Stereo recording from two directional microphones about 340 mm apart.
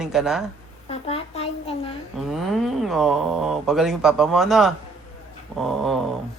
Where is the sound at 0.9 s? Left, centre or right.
Centre.